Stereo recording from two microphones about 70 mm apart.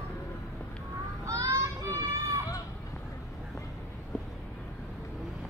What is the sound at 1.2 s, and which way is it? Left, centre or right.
Children playing, right.